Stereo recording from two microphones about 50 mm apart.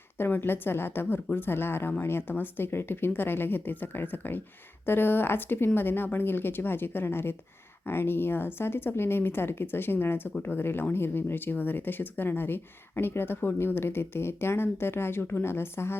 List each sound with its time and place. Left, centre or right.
0.2 s speech: left